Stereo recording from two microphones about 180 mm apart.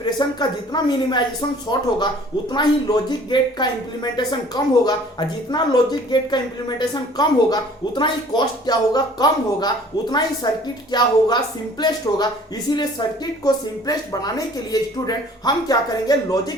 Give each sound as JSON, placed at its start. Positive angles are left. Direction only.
{"t": 0.0, "sound": "speech", "side_deg": 25}